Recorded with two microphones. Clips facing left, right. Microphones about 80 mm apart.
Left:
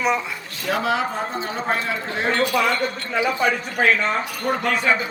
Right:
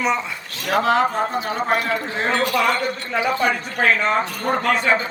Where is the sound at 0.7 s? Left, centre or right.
Centre.